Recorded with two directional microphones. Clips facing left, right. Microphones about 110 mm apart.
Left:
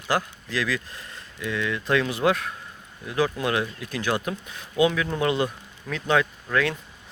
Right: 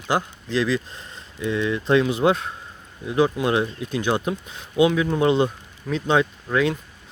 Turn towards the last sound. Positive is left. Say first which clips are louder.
# right 3 dB
turn(degrees=-20)  # may be behind; listen again after turning